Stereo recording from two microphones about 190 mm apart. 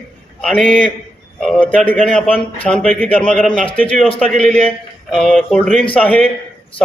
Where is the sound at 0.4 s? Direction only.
5° left (ahead or behind).